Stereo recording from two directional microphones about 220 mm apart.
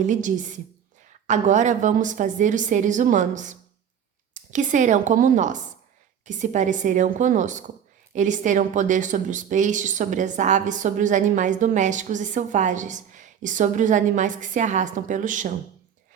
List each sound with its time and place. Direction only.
0.0 s speech: 35° right (ahead or behind)